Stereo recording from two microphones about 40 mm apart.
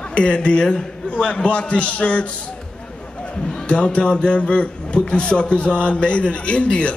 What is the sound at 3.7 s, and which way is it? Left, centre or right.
A man's voice, left.